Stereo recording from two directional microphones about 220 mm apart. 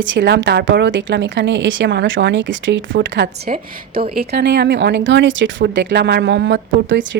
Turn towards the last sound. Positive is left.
turn(degrees=-55)  # may be behind; listen again after turning